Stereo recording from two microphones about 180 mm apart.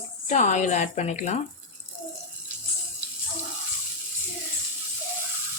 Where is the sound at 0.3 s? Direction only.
40° left (ahead or behind).